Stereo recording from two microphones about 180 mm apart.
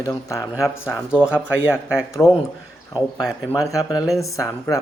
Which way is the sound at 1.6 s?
15° left (ahead or behind).